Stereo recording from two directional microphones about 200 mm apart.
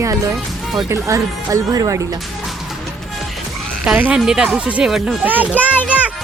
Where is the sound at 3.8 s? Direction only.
5° right (ahead or behind).